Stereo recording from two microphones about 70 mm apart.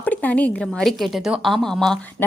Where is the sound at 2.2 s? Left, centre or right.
Left.